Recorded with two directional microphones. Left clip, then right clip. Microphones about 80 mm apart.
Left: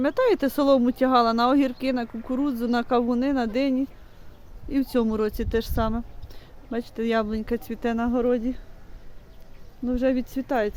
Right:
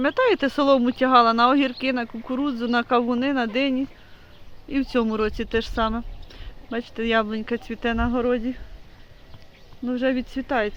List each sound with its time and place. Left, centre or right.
0.0 s speech: left
2.1 s speech: centre
2.4 s speech: left
8.1 s speech: left
9.9 s speech: left